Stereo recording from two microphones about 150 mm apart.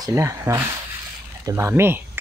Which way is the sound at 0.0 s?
20° right (ahead or behind).